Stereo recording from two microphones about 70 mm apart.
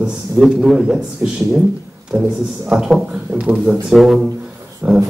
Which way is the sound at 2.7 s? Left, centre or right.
Centre.